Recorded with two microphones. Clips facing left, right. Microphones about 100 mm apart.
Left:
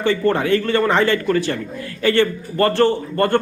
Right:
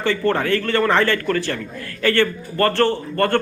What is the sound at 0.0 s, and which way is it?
A man's voice, 15° left (ahead or behind).